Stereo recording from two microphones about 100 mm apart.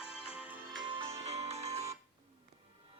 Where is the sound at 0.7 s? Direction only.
50° right (ahead or behind).